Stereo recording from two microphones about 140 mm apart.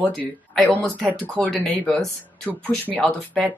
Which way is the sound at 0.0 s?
10° left (ahead or behind).